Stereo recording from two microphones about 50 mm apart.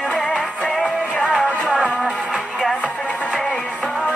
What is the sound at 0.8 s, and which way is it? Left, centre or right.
Music, centre.